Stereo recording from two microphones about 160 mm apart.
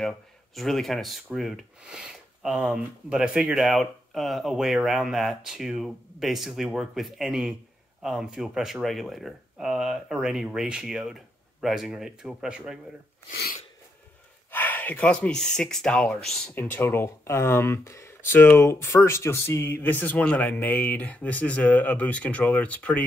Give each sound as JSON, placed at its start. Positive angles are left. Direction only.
{"t": 0.0, "sound": "speech", "side_deg": 0}
{"t": 13.3, "sound": "sneeze", "side_deg": 80}
{"t": 14.5, "sound": "speech", "side_deg": 10}